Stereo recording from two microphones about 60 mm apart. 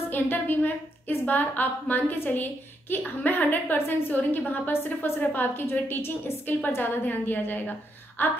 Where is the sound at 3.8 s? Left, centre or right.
Left.